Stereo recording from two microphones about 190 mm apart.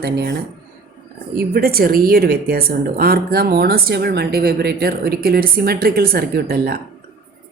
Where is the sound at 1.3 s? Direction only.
50° right (ahead or behind).